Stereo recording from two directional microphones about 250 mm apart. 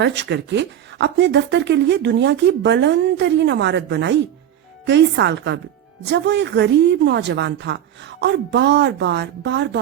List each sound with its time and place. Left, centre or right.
0.0 s speech: right